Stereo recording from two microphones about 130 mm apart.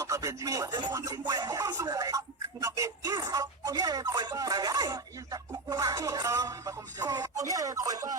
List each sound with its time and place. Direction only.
0.0 s speech: 25° right (ahead or behind)